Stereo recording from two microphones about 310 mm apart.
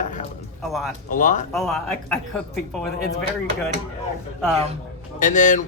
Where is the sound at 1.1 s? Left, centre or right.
Left.